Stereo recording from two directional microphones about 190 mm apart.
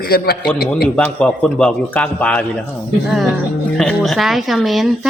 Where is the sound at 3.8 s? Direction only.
Centre (ahead or behind).